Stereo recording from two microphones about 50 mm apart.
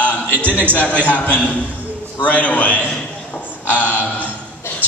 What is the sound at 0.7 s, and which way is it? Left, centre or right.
A man's voice, left.